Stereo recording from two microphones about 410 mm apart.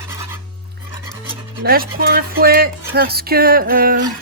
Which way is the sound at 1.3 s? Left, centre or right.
Centre.